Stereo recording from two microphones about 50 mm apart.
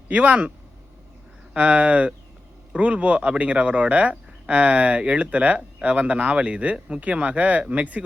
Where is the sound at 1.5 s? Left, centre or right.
Right.